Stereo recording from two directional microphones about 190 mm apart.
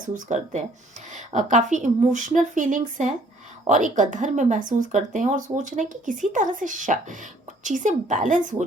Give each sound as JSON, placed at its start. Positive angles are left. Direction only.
{"t": 0.0, "sound": "speech", "side_deg": -40}